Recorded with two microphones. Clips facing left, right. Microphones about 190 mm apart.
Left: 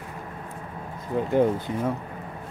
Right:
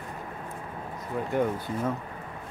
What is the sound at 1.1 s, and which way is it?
Speech, 25° left (ahead or behind).